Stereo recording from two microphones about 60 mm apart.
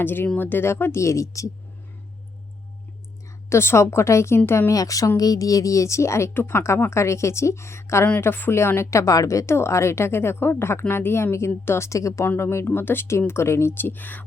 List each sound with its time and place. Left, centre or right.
0.0 s a woman's voice: left
3.5 s a woman's voice: left
4.4 s speech: left
4.7 s a woman's voice: left
8.0 s a woman's voice: left
12.4 s speech: left